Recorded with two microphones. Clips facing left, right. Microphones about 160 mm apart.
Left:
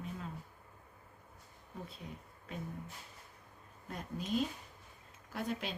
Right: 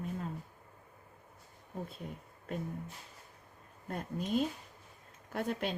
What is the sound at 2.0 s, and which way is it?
Speech, 45° right (ahead or behind).